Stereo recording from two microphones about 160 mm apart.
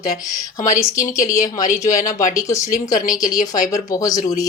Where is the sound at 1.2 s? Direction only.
20° left (ahead or behind).